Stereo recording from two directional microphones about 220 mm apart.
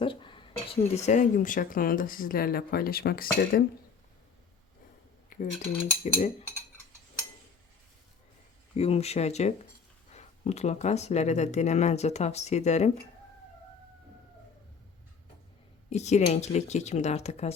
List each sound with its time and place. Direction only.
0.0 s speech: 25° left (ahead or behind); by 3.6 s 45° left (ahead or behind)
5.3 s cutlery: 40° left (ahead or behind)
6.0 s speech: 30° left (ahead or behind)
8.7 s speech: 30° left (ahead or behind)
15.9 s speech: 30° left (ahead or behind)